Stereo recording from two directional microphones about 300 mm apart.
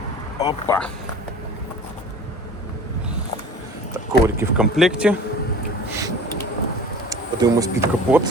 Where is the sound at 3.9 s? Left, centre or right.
Centre.